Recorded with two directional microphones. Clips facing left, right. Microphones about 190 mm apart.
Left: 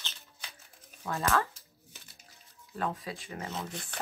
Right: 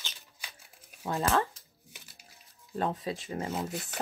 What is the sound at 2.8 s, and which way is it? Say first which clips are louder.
Speech: right 3 dB; 25° right (ahead or behind).